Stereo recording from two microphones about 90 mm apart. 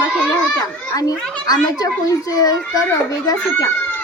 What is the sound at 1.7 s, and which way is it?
A child's voice, 40° left (ahead or behind).